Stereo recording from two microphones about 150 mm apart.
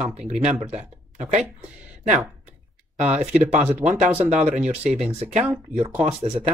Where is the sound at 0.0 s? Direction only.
45° right (ahead or behind).